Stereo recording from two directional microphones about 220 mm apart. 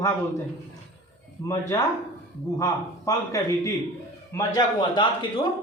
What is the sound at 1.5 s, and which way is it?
A man's voice, 15° left (ahead or behind).